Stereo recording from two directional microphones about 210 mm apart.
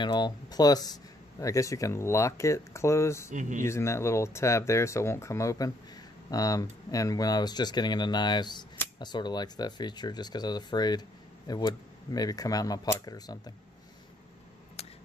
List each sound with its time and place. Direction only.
0.0 s speech: 20° left (ahead or behind)
3.3 s speech: 35° right (ahead or behind)
3.6 s speech: 15° left (ahead or behind)